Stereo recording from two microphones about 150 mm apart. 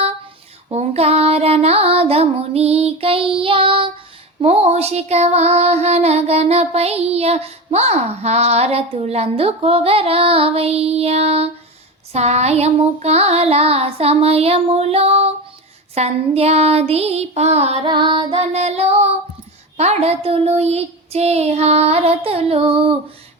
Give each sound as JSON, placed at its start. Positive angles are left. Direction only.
{"t": 0.7, "sound": "child singing", "side_deg": -45}
{"t": 4.4, "sound": "music", "side_deg": -40}
{"t": 12.1, "sound": "child singing", "side_deg": -45}
{"t": 17.8, "sound": "music", "side_deg": -30}
{"t": 18.5, "sound": "music", "side_deg": -45}
{"t": 19.7, "sound": "child singing", "side_deg": -45}